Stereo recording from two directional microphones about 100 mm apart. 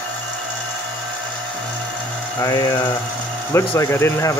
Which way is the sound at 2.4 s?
35° left (ahead or behind).